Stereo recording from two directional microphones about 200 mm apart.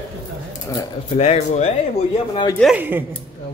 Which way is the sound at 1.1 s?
30° left (ahead or behind).